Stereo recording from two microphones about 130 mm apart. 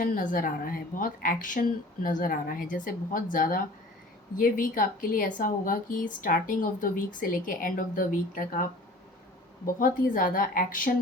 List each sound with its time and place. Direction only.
0.0 s a woman's voice: 90° left
9.7 s a woman's voice: 90° left